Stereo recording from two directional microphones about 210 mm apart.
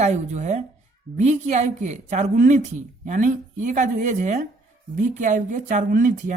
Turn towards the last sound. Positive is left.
turn(degrees=-40)  # may be behind; listen again after turning